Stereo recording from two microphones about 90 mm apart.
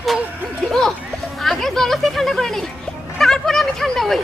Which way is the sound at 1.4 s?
5° left (ahead or behind).